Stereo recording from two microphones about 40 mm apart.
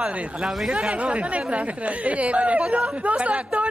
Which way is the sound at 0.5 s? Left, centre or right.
Centre.